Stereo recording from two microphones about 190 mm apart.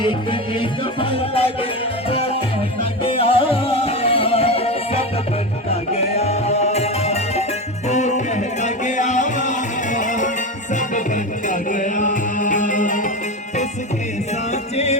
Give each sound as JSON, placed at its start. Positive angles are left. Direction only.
{"t": 0.0, "sound": "music", "side_deg": 25}
{"t": 14.5, "sound": "music", "side_deg": 35}